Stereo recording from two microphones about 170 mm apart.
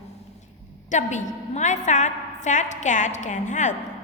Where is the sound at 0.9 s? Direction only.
45° left (ahead or behind).